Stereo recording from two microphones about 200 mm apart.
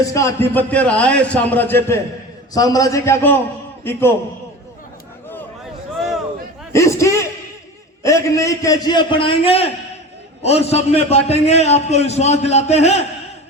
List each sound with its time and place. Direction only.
0.0 s a man's voice: 15° left (ahead or behind)
6.7 s a sound: 15° left (ahead or behind)
8.0 s a man's voice: 15° left (ahead or behind); by 13.1 s 35° left (ahead or behind)